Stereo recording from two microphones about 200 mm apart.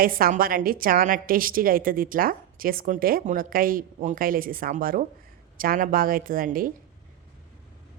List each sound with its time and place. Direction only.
0.0 s a woman's voice: 45° right (ahead or behind)